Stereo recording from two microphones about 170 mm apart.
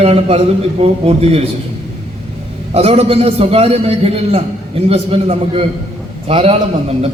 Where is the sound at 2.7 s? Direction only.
35° right (ahead or behind).